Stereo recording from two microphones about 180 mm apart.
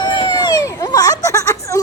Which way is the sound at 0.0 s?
25° left (ahead or behind).